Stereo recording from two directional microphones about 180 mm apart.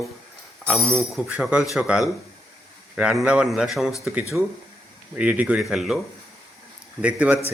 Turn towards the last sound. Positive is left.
turn(degrees=-5)  # may be behind; listen again after turning